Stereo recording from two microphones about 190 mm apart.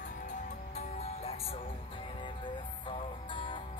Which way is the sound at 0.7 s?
35° left (ahead or behind).